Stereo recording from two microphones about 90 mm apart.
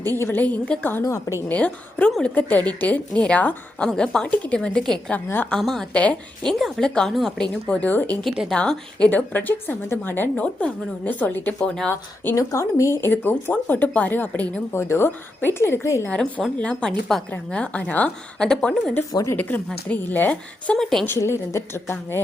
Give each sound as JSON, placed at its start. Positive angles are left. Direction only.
{"t": 0.2, "sound": "speech", "side_deg": 25}
{"t": 1.0, "sound": "speech", "side_deg": 35}
{"t": 1.5, "sound": "a woman's voice", "side_deg": 15}
{"t": 5.1, "sound": "a woman's voice", "side_deg": 15}
{"t": 5.5, "sound": "a woman's voice", "side_deg": 5}
{"t": 8.2, "sound": "a woman's voice", "side_deg": 5}
{"t": 11.9, "sound": "speech", "side_deg": 25}
{"t": 12.4, "sound": "speech", "side_deg": 35}
{"t": 13.1, "sound": "speech", "side_deg": 20}
{"t": 16.6, "sound": "a woman's voice", "side_deg": 10}
{"t": 19.1, "sound": "speech", "side_deg": 35}
{"t": 19.4, "sound": "a woman's voice", "side_deg": 20}
{"t": 20.7, "sound": "a woman's voice", "side_deg": 5}
{"t": 21.1, "sound": "speech", "side_deg": 30}